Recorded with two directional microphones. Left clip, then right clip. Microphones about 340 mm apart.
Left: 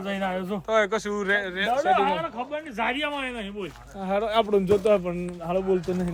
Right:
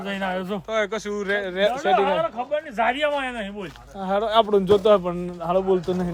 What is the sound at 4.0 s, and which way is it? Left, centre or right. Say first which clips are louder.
Speech: right 4 dB; centre.